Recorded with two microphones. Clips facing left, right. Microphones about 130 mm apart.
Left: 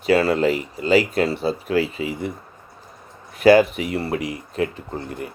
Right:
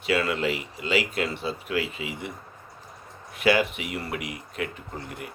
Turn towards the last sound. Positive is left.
turn(degrees=30)  # may be behind; listen again after turning